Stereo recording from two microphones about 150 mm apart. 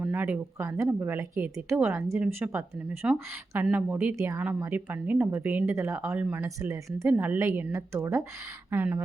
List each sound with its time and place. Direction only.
0.0 s a woman's voice: 10° right (ahead or behind)